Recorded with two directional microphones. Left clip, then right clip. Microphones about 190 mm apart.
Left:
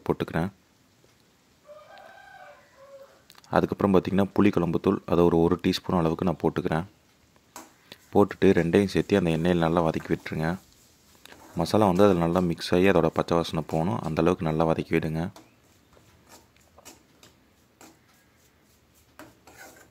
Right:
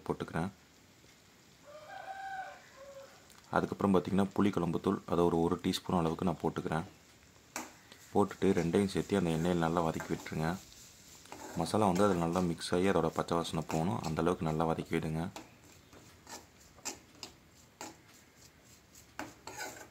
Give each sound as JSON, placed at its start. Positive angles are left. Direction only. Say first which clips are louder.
{"t": 0.0, "sound": "speech", "louder": "left 9 dB", "side_deg": 35}
{"t": 3.4, "sound": "speech", "louder": "left 8 dB", "side_deg": 30}
{"t": 7.9, "sound": "speech", "louder": "left 9 dB", "side_deg": 30}